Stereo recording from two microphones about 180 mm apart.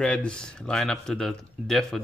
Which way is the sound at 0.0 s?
5° left (ahead or behind).